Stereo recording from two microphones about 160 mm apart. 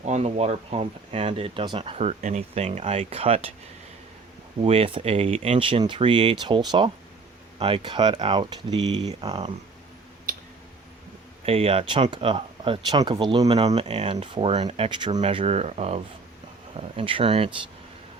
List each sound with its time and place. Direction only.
0.0 s speech: 40° right (ahead or behind)
4.6 s speech: 35° right (ahead or behind)
11.4 s speech: 35° right (ahead or behind)
13.7 s speech: 40° right (ahead or behind)